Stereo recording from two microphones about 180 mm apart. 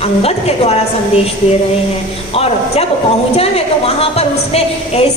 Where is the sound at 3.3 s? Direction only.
35° left (ahead or behind).